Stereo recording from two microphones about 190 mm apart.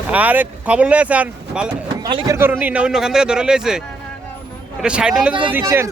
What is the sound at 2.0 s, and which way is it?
Speech, 20° right (ahead or behind).